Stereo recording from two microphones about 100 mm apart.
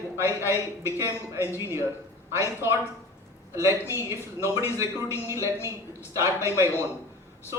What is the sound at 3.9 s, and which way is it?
Speech, 30° right (ahead or behind).